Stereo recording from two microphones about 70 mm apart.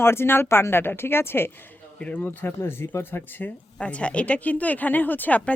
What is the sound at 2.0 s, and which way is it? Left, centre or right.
A woman's voice, left.